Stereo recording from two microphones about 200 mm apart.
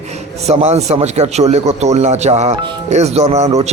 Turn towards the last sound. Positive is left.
turn(degrees=-35)  # may be behind; listen again after turning